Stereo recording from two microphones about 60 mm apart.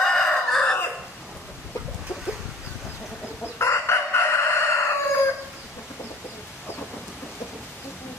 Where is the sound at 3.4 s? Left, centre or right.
Left.